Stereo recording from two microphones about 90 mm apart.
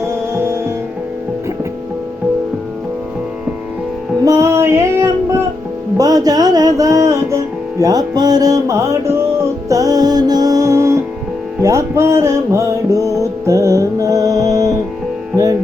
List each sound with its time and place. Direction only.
0.0 s music: 30° right (ahead or behind)
4.3 s music: 30° right (ahead or behind)